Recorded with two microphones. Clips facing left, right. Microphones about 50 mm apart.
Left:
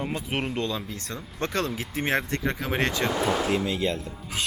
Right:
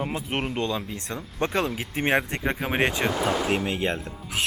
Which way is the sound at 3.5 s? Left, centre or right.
Right.